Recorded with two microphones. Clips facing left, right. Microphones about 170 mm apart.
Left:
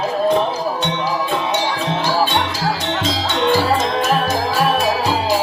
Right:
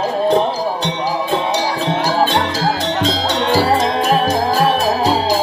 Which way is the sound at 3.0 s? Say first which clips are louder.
Even; 40° right (ahead or behind).